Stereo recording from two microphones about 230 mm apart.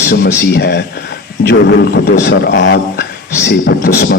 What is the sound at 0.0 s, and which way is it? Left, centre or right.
Speech, left.